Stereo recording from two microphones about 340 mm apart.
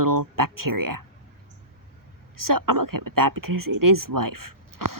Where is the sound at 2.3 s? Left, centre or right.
Right.